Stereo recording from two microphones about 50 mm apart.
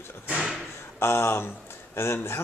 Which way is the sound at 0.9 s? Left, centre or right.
Left.